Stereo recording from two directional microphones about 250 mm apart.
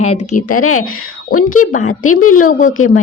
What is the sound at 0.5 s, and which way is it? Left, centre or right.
Speech, left.